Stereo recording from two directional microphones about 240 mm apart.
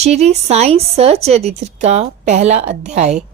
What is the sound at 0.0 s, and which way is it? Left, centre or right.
Speech, right.